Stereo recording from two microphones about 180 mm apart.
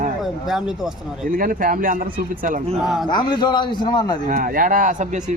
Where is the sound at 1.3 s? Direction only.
50° right (ahead or behind).